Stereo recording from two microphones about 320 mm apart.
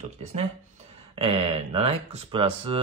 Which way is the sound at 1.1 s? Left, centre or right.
Centre.